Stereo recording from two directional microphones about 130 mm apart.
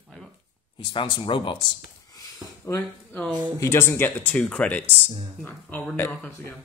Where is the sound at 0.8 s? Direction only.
40° left (ahead or behind).